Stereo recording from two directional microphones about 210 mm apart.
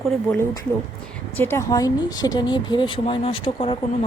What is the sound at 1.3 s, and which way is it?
Speech, 10° left (ahead or behind).